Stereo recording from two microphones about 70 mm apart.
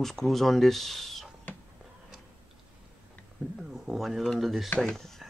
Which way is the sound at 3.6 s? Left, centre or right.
Centre.